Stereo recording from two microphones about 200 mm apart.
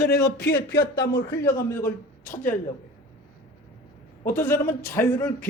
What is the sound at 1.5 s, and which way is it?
Speech, 10° left (ahead or behind).